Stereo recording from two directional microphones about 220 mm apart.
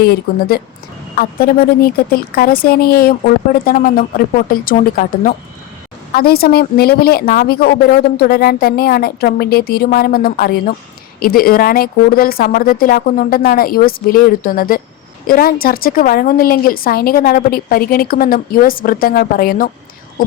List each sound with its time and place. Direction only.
0.0 s a woman's voice: 45° left (ahead or behind)